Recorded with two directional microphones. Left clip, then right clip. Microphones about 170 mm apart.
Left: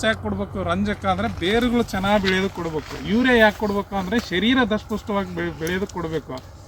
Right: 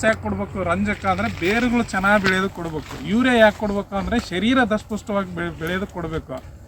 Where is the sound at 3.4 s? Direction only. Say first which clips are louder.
Right 2 dB; 5° right (ahead or behind).